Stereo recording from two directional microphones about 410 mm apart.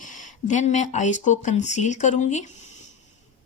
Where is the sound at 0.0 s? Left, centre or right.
Centre.